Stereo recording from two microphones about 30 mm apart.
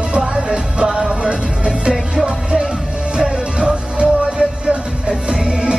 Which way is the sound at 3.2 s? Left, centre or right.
Right.